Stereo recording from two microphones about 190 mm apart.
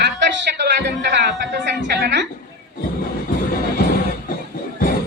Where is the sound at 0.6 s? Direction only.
65° right (ahead or behind).